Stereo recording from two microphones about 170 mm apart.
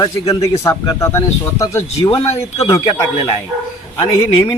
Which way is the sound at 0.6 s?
15° left (ahead or behind).